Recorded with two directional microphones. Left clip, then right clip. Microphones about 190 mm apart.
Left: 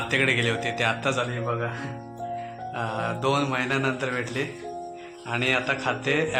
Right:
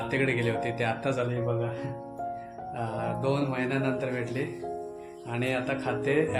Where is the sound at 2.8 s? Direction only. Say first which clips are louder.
Left 4 dB; 10° left (ahead or behind).